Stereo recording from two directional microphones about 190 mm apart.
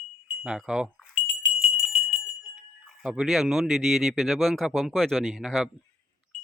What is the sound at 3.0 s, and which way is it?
Speech, centre (ahead or behind).